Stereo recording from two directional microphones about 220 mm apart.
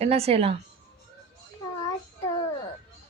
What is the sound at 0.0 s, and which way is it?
Speech, 30° right (ahead or behind).